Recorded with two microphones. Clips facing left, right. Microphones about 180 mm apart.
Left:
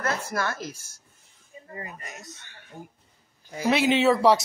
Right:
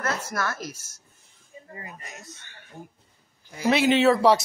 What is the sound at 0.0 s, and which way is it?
Speech, 25° left (ahead or behind).